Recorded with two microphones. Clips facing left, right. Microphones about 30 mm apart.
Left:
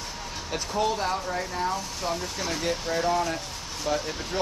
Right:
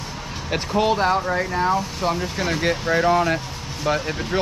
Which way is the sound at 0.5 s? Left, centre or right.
Right.